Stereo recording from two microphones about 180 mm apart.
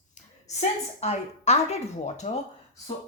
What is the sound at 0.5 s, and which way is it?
Speech, 35° left (ahead or behind).